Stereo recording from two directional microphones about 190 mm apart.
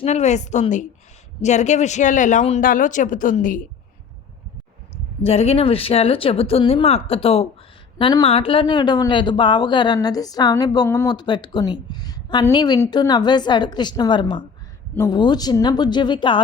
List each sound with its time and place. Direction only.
0.0 s speech: 35° left (ahead or behind)
5.2 s speech: 30° left (ahead or behind)